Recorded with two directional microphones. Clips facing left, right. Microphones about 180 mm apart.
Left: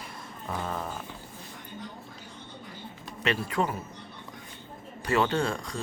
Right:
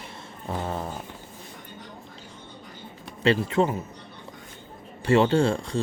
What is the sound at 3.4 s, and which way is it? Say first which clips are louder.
Speech: right 6 dB; 25° right (ahead or behind).